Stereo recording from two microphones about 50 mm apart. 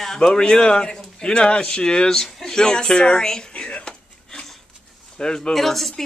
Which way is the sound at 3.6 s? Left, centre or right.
Centre.